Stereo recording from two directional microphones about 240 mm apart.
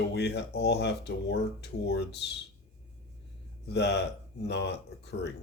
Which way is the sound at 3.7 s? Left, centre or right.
Left.